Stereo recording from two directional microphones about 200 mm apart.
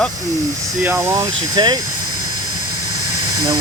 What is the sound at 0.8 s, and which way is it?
Speech, 10° right (ahead or behind).